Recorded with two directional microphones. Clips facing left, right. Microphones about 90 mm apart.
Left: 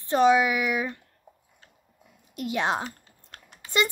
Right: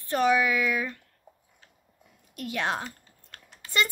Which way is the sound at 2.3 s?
20° left (ahead or behind).